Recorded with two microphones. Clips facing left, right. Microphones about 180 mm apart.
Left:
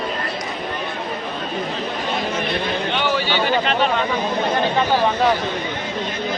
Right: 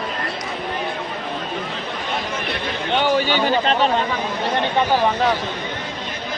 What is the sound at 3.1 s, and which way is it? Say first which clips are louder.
Speech: even; 45° right (ahead or behind).